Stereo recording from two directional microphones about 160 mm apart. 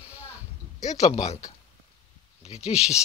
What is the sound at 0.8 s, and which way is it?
Speech, 45° left (ahead or behind).